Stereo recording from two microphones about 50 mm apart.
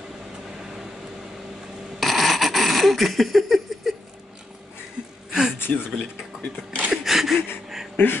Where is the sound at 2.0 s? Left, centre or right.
Centre.